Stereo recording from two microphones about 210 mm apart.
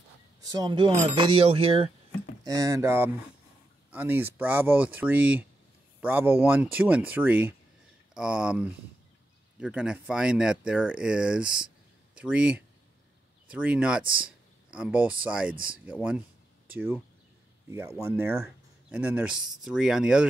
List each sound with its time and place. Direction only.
0.4 s speech: 20° right (ahead or behind)
2.4 s speech: 15° right (ahead or behind)